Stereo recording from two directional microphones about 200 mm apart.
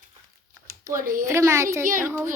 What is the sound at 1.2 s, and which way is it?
A woman's voice, 15° right (ahead or behind).